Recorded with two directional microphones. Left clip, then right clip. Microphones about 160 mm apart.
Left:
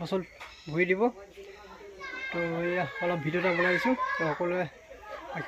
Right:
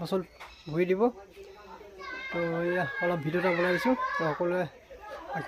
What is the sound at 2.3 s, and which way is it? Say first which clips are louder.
Speech: right 1 dB; 15° right (ahead or behind).